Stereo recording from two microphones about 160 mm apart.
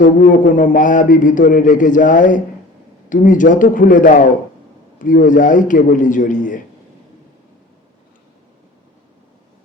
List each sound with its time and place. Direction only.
0.0 s a man's voice: 55° left (ahead or behind)